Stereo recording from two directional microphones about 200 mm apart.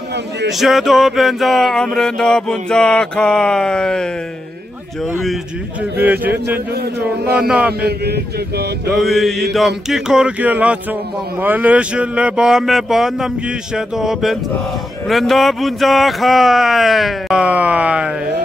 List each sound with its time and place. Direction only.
0.5 s speech: centre (ahead or behind)
5.2 s speech: 5° right (ahead or behind)
6.7 s music: 50° right (ahead or behind)
7.4 s speech: 5° right (ahead or behind)
7.8 s music: 55° right (ahead or behind)
8.9 s speech: centre (ahead or behind)